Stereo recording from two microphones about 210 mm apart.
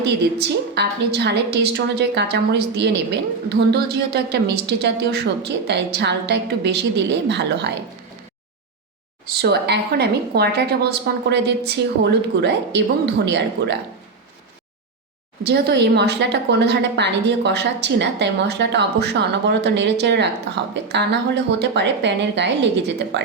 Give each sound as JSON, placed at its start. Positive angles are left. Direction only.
{"t": 0.0, "sound": "a woman's voice", "side_deg": -50}
{"t": 9.3, "sound": "a woman's voice", "side_deg": -50}
{"t": 15.4, "sound": "a woman's voice", "side_deg": -50}